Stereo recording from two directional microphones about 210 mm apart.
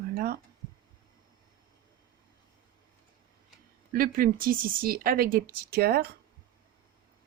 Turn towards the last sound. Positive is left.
turn(degrees=-45)  # may be behind; listen again after turning